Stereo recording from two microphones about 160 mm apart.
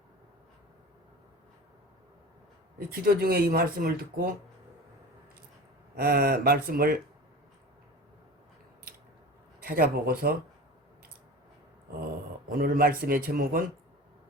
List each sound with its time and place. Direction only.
2.7 s speech: 70° right (ahead or behind)
6.0 s speech: 70° right (ahead or behind)
9.6 s speech: 65° right (ahead or behind)
12.5 s speech: 65° right (ahead or behind)